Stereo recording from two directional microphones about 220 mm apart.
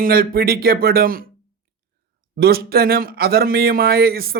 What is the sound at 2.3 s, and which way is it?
A man's voice, 45° right (ahead or behind).